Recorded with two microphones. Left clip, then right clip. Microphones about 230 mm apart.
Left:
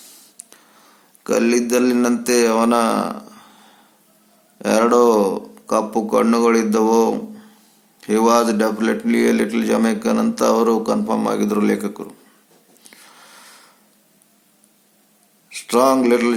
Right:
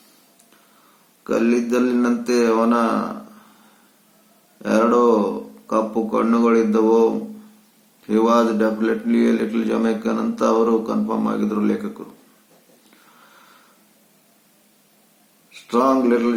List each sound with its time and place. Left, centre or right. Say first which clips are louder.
1.2 s a man's voice: left 2 dB; left
4.6 s a man's voice: left 2 dB; left
15.6 s a man's voice: left 3 dB; left